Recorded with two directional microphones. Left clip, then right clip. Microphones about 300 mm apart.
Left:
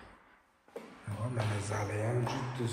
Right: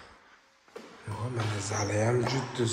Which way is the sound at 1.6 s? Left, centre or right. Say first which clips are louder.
Right 5 dB; centre.